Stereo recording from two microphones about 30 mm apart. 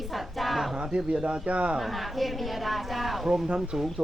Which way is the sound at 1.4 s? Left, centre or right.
Right.